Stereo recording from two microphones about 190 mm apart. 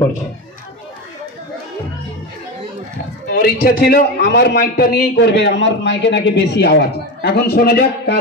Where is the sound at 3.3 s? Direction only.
55° left (ahead or behind).